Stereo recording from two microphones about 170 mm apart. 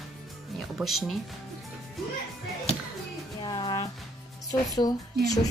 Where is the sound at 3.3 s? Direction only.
25° left (ahead or behind).